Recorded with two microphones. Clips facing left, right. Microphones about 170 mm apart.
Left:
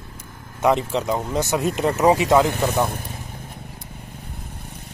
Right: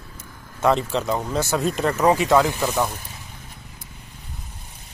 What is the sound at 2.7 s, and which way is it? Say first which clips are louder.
Speech: left 2 dB; 55° left (ahead or behind).